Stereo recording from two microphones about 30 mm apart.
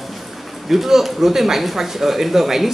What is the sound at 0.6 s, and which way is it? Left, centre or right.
Speech, centre.